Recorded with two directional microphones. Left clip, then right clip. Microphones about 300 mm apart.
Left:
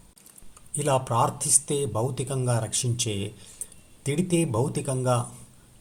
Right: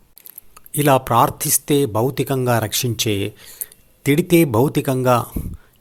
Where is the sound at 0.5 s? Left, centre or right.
Right.